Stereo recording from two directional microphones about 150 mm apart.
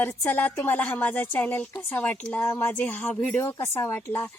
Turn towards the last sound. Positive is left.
turn(degrees=15)  # may be behind; listen again after turning